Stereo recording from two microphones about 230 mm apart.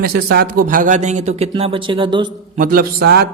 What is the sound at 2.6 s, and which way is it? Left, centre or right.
Speech, right.